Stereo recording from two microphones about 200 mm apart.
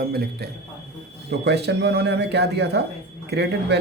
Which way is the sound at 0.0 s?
50° right (ahead or behind).